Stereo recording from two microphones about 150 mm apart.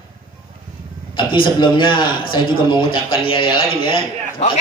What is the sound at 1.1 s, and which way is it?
A man's voice, 30° left (ahead or behind).